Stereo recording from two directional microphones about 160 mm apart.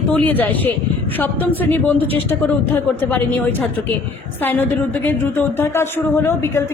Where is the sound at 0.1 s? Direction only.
10° left (ahead or behind).